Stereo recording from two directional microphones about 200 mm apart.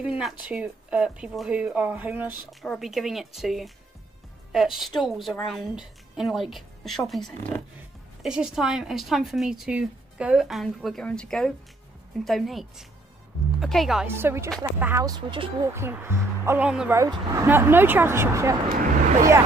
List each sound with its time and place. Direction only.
0.2 s a woman's voice: 5° right (ahead or behind); by 15.7 s 25° right (ahead or behind)
15.7 s speech: 10° right (ahead or behind)